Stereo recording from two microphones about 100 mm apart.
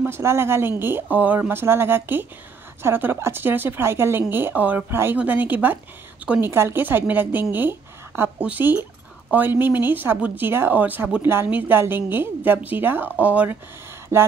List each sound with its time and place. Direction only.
0.0 s speech: 25° right (ahead or behind)
6.5 s speech: 25° right (ahead or behind)
14.1 s speech: 30° right (ahead or behind)